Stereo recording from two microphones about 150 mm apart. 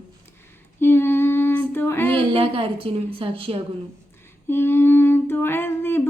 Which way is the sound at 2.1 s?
35° right (ahead or behind).